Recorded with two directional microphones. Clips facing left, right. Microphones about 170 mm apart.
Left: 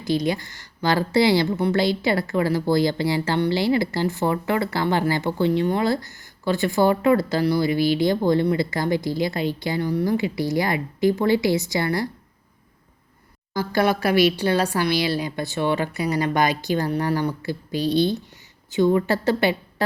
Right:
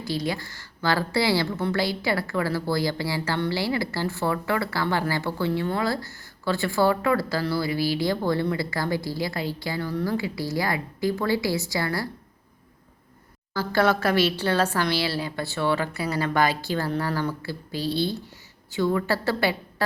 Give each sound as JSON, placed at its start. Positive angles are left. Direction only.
{"t": 0.0, "sound": "a woman's voice", "side_deg": 20}
{"t": 13.5, "sound": "a woman's voice", "side_deg": 15}